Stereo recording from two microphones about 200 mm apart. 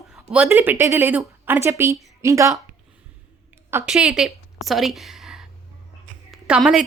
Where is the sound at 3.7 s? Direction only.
5° right (ahead or behind).